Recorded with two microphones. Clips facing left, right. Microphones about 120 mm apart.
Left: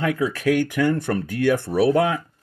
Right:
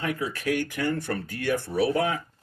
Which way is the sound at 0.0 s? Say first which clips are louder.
Left 7 dB; 90° left.